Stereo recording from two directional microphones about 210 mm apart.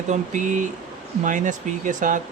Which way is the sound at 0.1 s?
35° right (ahead or behind).